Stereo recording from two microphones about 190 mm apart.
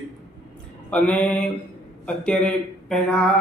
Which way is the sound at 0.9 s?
5° left (ahead or behind).